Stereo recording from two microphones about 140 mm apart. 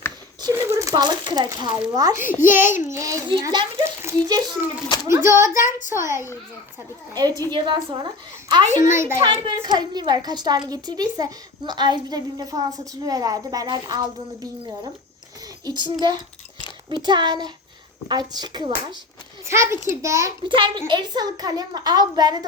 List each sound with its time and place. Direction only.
0.5 s speech: 15° right (ahead or behind)
2.1 s a child's voice: 15° right (ahead or behind)
3.4 s a child's voice: 35° right (ahead or behind)
7.3 s a child's voice: 35° right (ahead or behind); by 9.2 s 20° right (ahead or behind)
9.2 s a child's voice: 30° right (ahead or behind)
15.6 s a child's voice: 30° right (ahead or behind)
19.5 s speech: 20° right (ahead or behind)
20.4 s a child's voice: 35° right (ahead or behind)